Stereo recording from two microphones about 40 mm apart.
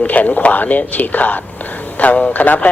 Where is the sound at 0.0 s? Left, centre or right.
Left.